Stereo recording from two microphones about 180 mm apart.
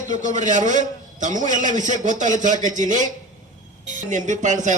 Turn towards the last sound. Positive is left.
turn(degrees=-45)  # may be behind; listen again after turning